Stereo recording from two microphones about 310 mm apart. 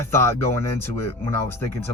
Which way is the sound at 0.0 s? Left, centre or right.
Centre.